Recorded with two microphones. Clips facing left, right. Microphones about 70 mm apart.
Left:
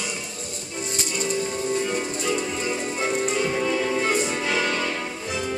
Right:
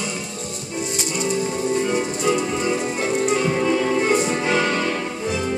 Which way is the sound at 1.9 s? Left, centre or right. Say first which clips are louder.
Right 5 dB; centre.